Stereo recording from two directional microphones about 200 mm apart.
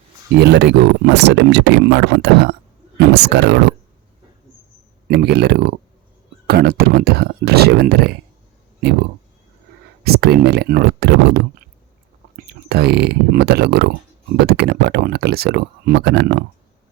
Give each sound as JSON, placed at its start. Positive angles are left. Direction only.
{"t": 0.4, "sound": "speech", "side_deg": -60}
{"t": 5.0, "sound": "speech", "side_deg": -55}
{"t": 10.0, "sound": "speech", "side_deg": -55}